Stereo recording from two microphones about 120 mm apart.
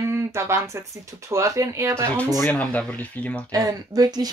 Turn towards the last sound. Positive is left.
turn(degrees=-35)  # may be behind; listen again after turning